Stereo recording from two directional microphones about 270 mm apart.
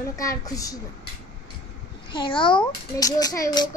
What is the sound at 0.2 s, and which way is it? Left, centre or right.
Speech, centre.